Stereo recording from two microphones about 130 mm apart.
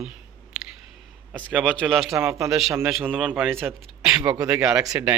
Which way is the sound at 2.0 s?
Centre (ahead or behind).